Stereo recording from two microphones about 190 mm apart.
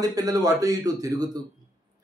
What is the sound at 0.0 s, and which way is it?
A man's voice, 20° right (ahead or behind).